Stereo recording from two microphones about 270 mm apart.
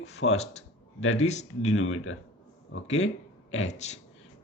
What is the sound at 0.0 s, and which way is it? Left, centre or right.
Speech, left.